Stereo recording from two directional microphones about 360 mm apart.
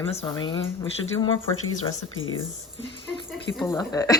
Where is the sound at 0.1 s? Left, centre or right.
Centre.